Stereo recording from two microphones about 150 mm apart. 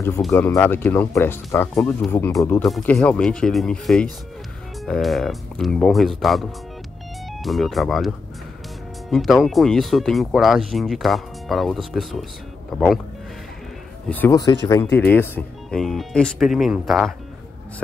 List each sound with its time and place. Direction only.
0.3 s speech: 15° left (ahead or behind); by 8.1 s centre (ahead or behind)
9.1 s speech: centre (ahead or behind)
14.0 s speech: 10° left (ahead or behind)
14.3 s speech: 25° left (ahead or behind)
15.7 s speech: centre (ahead or behind)